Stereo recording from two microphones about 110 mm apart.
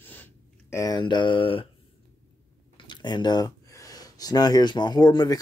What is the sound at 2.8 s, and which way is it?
Speech, 40° left (ahead or behind).